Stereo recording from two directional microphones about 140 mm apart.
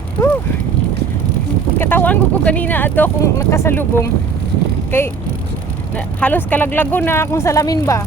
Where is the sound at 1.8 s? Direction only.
15° left (ahead or behind).